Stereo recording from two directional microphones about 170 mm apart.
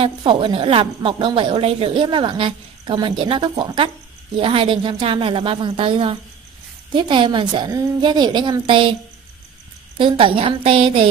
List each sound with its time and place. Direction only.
0.0 s a woman's voice: 30° right (ahead or behind)
9.9 s a woman's voice: 30° right (ahead or behind)